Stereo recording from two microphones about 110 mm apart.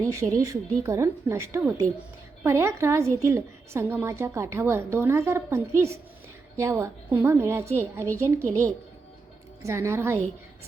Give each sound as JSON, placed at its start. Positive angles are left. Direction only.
{"t": 0.0, "sound": "a woman's voice", "side_deg": -30}
{"t": 9.6, "sound": "a woman's voice", "side_deg": -25}